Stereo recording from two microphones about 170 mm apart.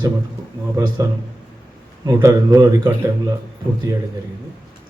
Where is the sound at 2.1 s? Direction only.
20° right (ahead or behind).